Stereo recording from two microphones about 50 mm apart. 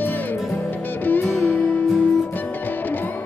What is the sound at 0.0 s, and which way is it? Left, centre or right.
Music, left.